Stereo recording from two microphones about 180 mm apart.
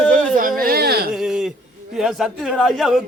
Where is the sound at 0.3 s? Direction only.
50° right (ahead or behind).